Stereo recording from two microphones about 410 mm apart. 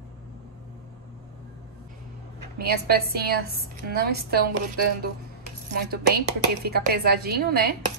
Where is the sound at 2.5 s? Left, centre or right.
Right.